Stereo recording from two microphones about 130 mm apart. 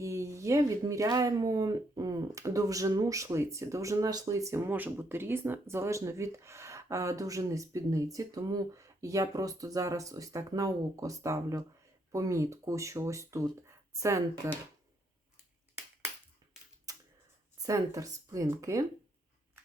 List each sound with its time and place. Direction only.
0.0 s speech: 25° right (ahead or behind)
16.9 s a sound: 25° right (ahead or behind)
17.6 s speech: 25° right (ahead or behind)